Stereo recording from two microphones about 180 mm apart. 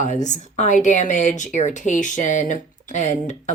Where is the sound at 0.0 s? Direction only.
40° left (ahead or behind).